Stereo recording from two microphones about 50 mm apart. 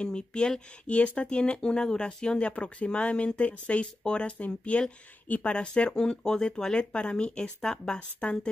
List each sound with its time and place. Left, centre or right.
0.0 s speech: centre